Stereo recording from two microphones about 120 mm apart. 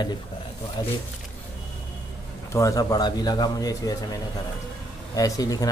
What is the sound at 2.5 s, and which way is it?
Speech, 30° left (ahead or behind).